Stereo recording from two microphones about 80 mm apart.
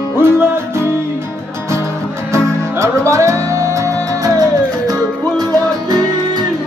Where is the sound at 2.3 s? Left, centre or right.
Right.